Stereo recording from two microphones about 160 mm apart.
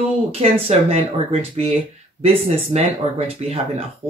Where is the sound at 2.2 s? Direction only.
40° right (ahead or behind).